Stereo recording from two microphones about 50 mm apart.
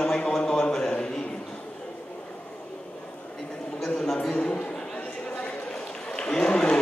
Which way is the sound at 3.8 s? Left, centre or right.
Centre.